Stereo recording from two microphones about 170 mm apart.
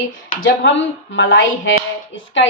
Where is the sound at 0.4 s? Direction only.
90° left.